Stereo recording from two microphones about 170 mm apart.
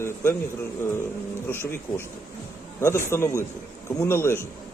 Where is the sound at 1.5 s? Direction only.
15° left (ahead or behind).